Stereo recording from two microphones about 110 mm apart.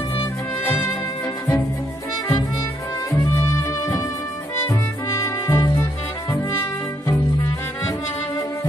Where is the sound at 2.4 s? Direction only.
35° left (ahead or behind).